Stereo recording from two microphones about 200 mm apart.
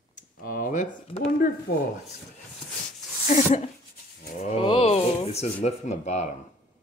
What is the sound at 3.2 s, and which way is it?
Speech, 35° left (ahead or behind).